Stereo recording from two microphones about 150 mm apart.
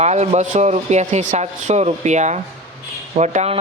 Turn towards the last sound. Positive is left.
turn(degrees=-50)  # may be behind; listen again after turning